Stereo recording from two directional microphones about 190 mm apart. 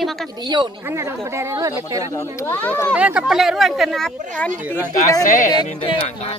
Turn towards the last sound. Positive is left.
turn(degrees=30)  # may be behind; listen again after turning